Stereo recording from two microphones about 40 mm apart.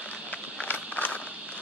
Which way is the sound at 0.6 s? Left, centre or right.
Left.